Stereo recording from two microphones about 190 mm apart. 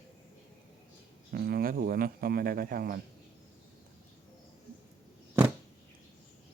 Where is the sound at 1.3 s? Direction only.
55° right (ahead or behind).